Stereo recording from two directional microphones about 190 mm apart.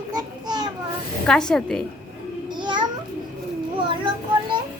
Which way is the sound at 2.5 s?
25° right (ahead or behind).